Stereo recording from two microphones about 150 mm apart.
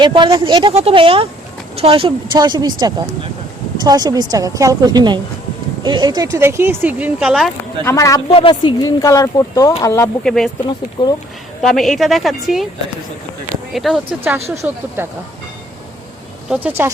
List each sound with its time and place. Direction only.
0.0 s speech: 30° right (ahead or behind)
0.7 s a woman's voice: 40° right (ahead or behind); by 7.5 s 5° right (ahead or behind)
7.9 s speech: 20° left (ahead or behind)
8.3 s speech: 35° left (ahead or behind); by 10.1 s 20° left (ahead or behind)
10.2 s speech: 5° left (ahead or behind)
11.0 s speech: 30° left (ahead or behind)
11.6 s speech: centre (ahead or behind)
13.7 s speech: centre (ahead or behind)
14.5 s a woman's voice: 20° right (ahead or behind)
16.5 s speech: 10° right (ahead or behind)